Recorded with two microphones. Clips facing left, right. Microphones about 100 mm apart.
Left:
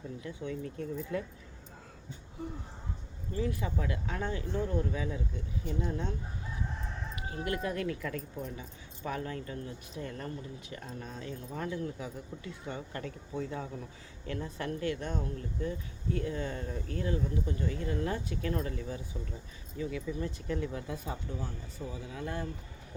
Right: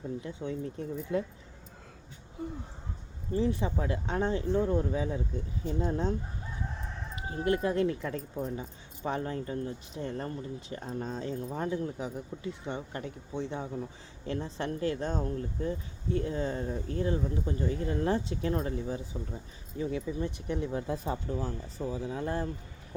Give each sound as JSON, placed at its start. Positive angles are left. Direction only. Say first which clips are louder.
{"t": 0.2, "sound": "speech", "louder": "right 2 dB", "side_deg": -30}
{"t": 3.3, "sound": "speech", "louder": "right 5 dB", "side_deg": -30}
{"t": 7.2, "sound": "speech", "louder": "right 6 dB", "side_deg": -30}